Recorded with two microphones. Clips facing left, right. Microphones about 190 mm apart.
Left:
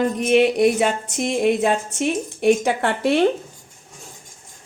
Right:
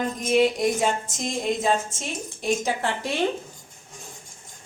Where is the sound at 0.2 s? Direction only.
65° left (ahead or behind).